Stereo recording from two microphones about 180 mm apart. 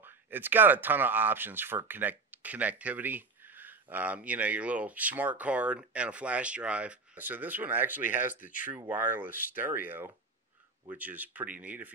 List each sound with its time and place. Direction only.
0.0 s speech: 10° right (ahead or behind)
8.4 s speech: 50° left (ahead or behind)
8.6 s speech: 10° right (ahead or behind)